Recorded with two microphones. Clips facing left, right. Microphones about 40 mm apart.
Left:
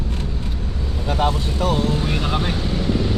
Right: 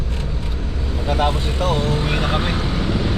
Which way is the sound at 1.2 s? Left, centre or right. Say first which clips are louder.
Left 1 dB; right.